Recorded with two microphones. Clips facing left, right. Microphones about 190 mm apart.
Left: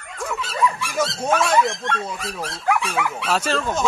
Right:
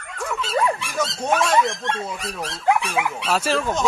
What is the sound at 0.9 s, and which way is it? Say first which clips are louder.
Speech: left 1 dB; centre (ahead or behind).